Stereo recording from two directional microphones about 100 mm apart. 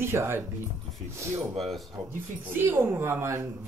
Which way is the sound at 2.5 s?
20° right (ahead or behind).